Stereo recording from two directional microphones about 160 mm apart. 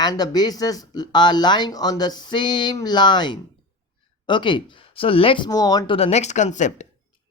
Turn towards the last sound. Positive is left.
turn(degrees=50)  # may be behind; listen again after turning